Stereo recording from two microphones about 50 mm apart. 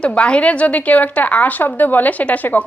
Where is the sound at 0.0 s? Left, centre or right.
Left.